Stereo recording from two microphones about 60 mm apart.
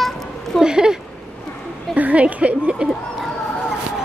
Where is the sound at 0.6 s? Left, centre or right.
Centre.